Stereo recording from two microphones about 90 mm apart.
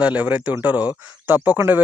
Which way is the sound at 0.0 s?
15° right (ahead or behind).